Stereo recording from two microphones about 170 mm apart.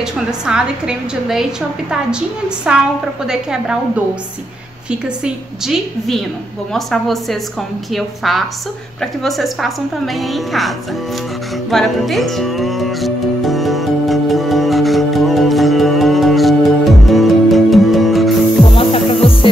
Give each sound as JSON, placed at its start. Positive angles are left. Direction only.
{"t": 0.0, "sound": "a woman's voice", "side_deg": -5}
{"t": 5.0, "sound": "a woman's voice", "side_deg": -5}
{"t": 11.7, "sound": "music", "side_deg": 0}
{"t": 18.8, "sound": "music", "side_deg": 30}